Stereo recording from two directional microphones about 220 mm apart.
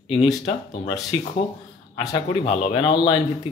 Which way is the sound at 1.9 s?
15° left (ahead or behind).